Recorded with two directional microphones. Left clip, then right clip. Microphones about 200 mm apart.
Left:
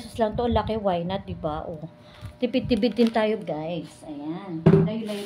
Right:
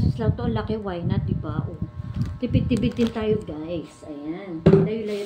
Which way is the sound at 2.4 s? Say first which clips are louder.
Left 2 dB; 50° left (ahead or behind).